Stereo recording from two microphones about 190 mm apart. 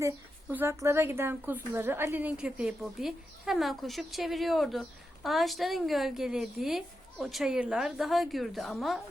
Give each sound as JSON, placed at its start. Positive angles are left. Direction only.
{"t": 0.0, "sound": "a woman's voice", "side_deg": -10}